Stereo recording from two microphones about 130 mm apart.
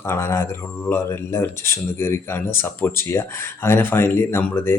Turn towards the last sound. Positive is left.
turn(degrees=20)  # may be behind; listen again after turning